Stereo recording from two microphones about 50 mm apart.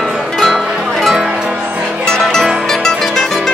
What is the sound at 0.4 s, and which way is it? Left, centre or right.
Music, centre.